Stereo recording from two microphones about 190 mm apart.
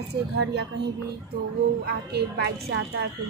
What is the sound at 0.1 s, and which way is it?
Speech, 60° right (ahead or behind).